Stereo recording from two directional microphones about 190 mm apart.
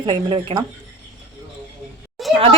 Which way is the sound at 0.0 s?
25° right (ahead or behind).